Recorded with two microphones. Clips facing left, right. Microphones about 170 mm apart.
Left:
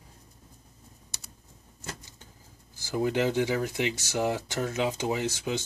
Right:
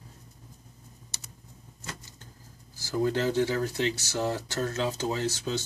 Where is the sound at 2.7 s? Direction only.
15° left (ahead or behind).